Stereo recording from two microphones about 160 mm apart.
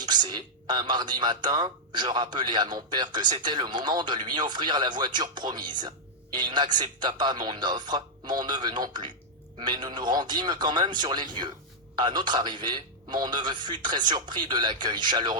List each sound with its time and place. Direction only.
0.0 s speech: 30° right (ahead or behind)